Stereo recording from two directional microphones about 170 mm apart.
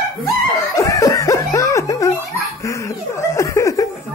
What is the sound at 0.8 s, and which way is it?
Snicker, 20° left (ahead or behind).